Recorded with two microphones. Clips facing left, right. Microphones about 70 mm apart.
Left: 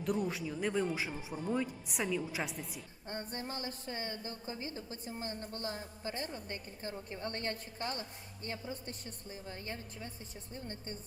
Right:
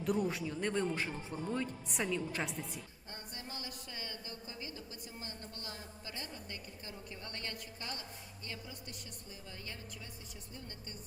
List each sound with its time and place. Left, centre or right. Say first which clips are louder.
0.0 s speech: right 1 dB; centre
3.1 s a woman's voice: left 8 dB; left